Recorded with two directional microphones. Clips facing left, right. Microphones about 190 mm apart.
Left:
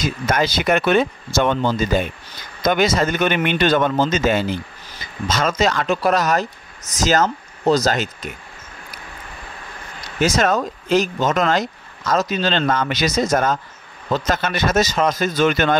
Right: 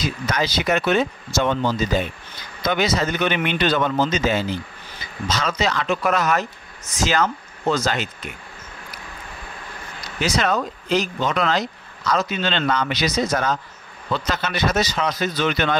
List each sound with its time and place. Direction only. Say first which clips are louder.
0.0 s speech: left 4 dB; 50° left (ahead or behind)
10.2 s speech: left 4 dB; 45° left (ahead or behind)